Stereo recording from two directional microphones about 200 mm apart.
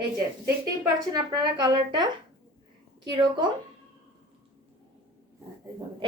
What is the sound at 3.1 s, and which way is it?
Speech, 25° right (ahead or behind).